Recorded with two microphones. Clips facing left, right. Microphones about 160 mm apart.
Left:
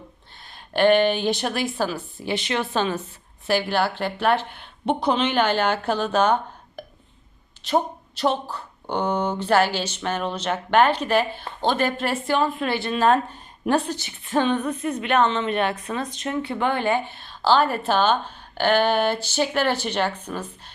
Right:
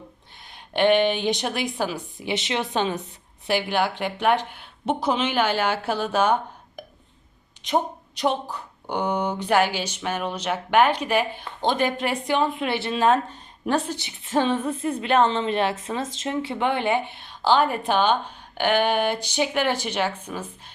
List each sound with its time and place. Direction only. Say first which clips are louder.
0.5 s a woman's voice: left 2 dB; 20° right (ahead or behind)